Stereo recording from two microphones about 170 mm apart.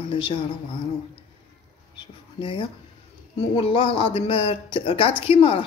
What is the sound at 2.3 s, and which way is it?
Speech, 30° left (ahead or behind).